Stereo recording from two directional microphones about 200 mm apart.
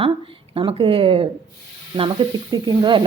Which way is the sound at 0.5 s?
25° right (ahead or behind).